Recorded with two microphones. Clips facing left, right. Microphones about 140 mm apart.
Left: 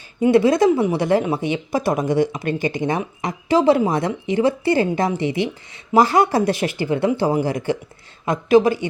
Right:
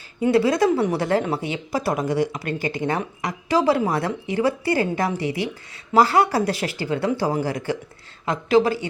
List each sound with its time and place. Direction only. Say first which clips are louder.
0.2 s speech: left 4 dB; 20° left (ahead or behind)